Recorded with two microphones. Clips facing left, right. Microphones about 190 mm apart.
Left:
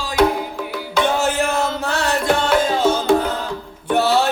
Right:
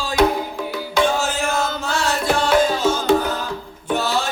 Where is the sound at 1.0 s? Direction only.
60° left (ahead or behind).